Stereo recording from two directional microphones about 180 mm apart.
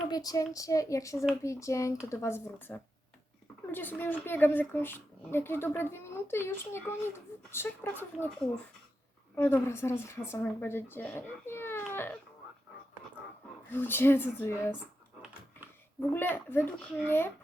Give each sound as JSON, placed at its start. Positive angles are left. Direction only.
{"t": 0.1, "sound": "a woman's voice", "side_deg": 20}
{"t": 13.7, "sound": "a woman's voice", "side_deg": 10}
{"t": 16.0, "sound": "a woman's voice", "side_deg": 10}